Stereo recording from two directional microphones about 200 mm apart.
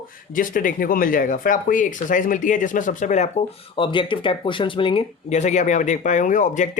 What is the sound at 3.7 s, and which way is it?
Speech, 25° left (ahead or behind).